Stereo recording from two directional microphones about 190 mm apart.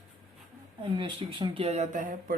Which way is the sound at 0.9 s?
25° right (ahead or behind).